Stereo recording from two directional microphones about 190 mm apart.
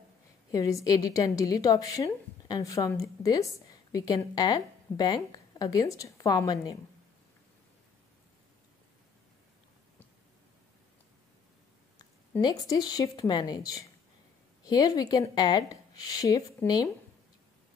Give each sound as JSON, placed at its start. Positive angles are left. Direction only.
{"t": 0.5, "sound": "a woman's voice", "side_deg": 15}
{"t": 12.4, "sound": "a woman's voice", "side_deg": 20}